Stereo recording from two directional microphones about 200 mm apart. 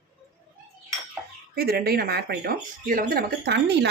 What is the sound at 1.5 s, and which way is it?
Speech, 50° right (ahead or behind).